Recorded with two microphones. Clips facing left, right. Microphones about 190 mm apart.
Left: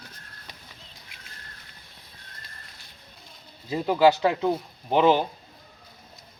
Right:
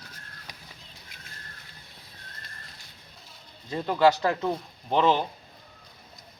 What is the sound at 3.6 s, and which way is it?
Speech, 5° left (ahead or behind).